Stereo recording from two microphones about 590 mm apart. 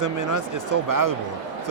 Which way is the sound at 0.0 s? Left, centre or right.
Right.